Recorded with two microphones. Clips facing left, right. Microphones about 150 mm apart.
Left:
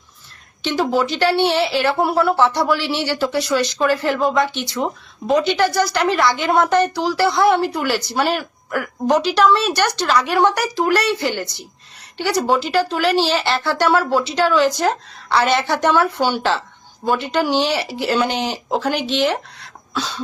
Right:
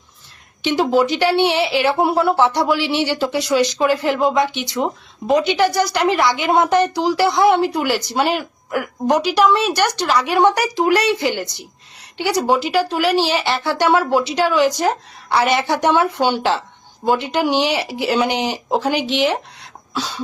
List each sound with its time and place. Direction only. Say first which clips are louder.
0.6 s speech: right 3 dB; 20° right (ahead or behind)